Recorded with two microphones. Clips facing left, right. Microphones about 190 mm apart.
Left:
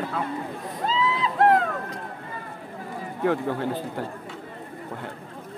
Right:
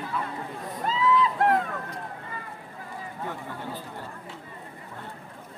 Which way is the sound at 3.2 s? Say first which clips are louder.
Left 14 dB; 85° left.